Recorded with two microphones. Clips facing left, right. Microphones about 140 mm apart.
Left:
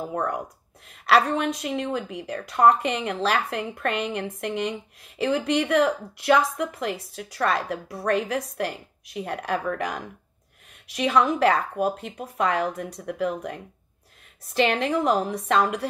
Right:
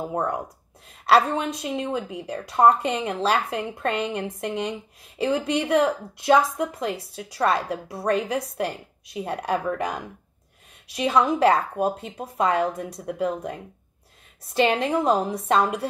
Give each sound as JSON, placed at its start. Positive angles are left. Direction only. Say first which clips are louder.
{"t": 0.0, "sound": "speech", "louder": "right 1 dB", "side_deg": -25}